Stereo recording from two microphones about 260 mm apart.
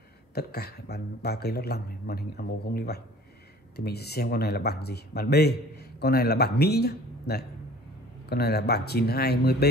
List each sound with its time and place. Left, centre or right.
0.3 s speech: left